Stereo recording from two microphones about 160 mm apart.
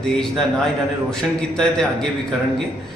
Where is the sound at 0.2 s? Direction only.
Centre (ahead or behind).